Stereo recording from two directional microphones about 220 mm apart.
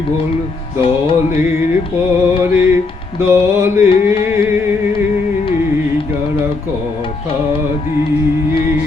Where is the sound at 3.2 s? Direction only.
10° right (ahead or behind).